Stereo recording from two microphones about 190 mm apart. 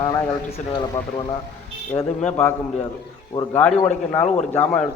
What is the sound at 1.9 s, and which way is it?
Speech, 15° left (ahead or behind).